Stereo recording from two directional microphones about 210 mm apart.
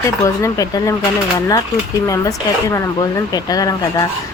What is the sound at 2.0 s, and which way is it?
Speech, 15° left (ahead or behind).